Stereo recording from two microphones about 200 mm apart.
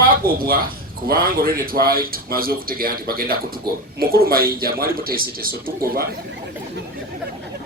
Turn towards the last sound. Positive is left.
turn(degrees=-50)  # may be behind; listen again after turning